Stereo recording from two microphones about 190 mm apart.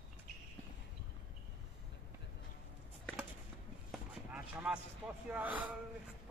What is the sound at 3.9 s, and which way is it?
Basketball bounce, 5° right (ahead or behind).